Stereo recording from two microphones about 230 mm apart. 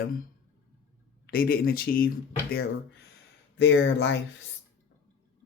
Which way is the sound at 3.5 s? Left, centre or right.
Left.